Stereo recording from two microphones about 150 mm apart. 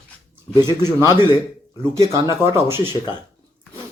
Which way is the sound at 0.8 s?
15° right (ahead or behind).